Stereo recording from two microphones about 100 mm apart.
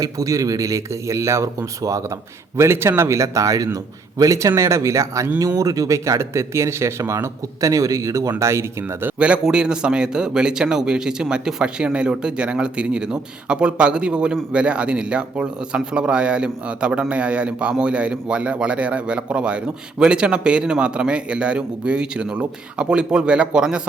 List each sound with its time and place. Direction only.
0.0 s speech: 35° right (ahead or behind)
9.1 s a man's voice: 10° right (ahead or behind)